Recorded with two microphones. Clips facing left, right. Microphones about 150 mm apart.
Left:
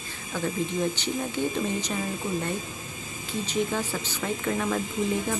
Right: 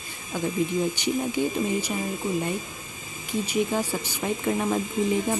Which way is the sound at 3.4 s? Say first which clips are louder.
Right 2 dB; 10° right (ahead or behind).